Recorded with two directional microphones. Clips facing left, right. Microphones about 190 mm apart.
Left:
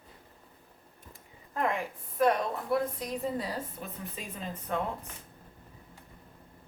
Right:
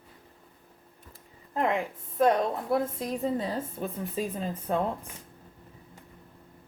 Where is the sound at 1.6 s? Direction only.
25° right (ahead or behind).